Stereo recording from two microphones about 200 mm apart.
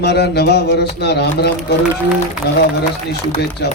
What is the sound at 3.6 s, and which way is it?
Speech, 55° left (ahead or behind).